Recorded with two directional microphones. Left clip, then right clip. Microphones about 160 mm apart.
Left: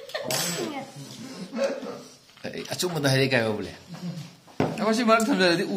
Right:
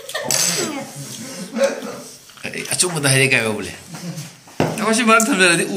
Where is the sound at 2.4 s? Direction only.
45° left (ahead or behind).